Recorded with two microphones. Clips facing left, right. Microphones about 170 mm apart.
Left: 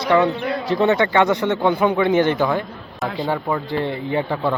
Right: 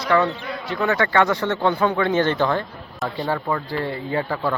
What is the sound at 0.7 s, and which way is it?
Speech, 25° left (ahead or behind).